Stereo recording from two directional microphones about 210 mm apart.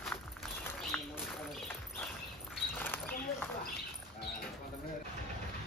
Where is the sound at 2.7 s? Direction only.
10° left (ahead or behind).